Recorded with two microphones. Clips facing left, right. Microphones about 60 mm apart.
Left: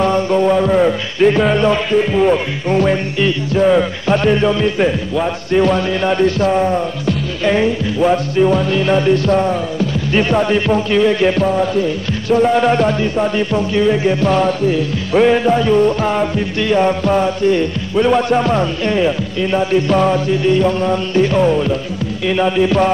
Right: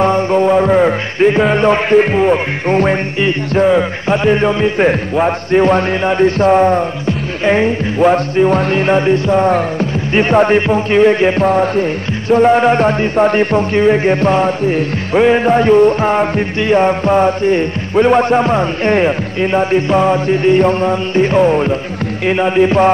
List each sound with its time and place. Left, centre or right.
0.0 s music: right
1.5 s music: right
2.1 s music: right
3.6 s speech: centre
4.4 s music: right
10.9 s music: right
15.1 s music: centre
15.4 s music: right
18.9 s music: right